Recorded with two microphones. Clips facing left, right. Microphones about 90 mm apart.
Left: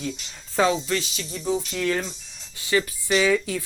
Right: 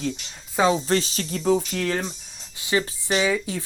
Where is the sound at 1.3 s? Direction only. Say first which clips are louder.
Right 5 dB; 65° right (ahead or behind).